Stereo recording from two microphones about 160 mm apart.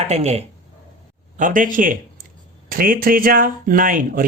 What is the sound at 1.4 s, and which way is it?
Speech, 55° right (ahead or behind).